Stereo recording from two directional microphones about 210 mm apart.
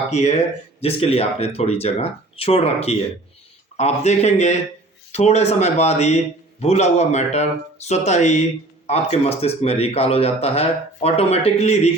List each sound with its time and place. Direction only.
0.1 s a man's voice: 30° left (ahead or behind)